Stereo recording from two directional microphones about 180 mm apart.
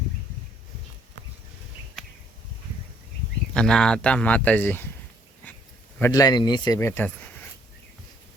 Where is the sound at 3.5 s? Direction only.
5° left (ahead or behind).